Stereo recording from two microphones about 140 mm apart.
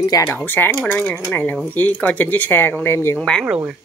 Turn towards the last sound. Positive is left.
turn(degrees=-5)  # may be behind; listen again after turning